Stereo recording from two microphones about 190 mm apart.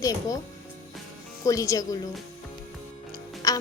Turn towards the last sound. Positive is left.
turn(degrees=20)  # may be behind; listen again after turning